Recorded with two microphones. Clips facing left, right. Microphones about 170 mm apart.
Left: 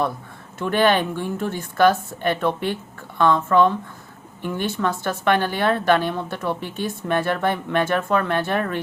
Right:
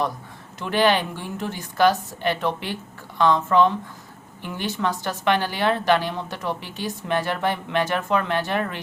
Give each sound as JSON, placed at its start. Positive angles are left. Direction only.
{"t": 0.6, "sound": "a woman's voice", "side_deg": 50}
{"t": 4.8, "sound": "a woman's voice", "side_deg": 50}